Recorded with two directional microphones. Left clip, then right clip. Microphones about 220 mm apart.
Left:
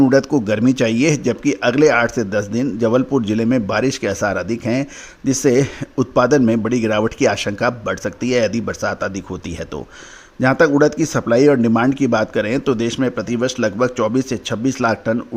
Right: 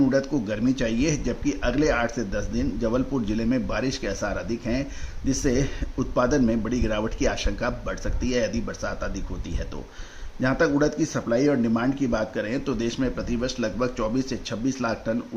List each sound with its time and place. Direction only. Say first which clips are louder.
0.0 s a man's voice: left 9 dB; 40° left (ahead or behind)
10.4 s a man's voice: left 9 dB; 35° left (ahead or behind)